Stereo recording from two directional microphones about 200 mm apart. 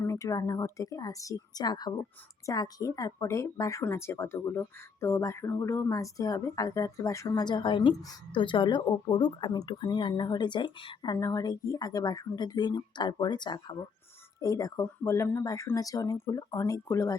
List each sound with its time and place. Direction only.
0.0 s speech: 15° left (ahead or behind)